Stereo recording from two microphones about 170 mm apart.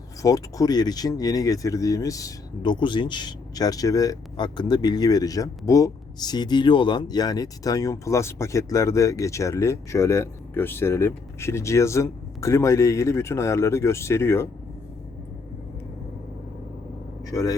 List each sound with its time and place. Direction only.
0.2 s speech: 20° left (ahead or behind)
17.2 s speech: 20° left (ahead or behind)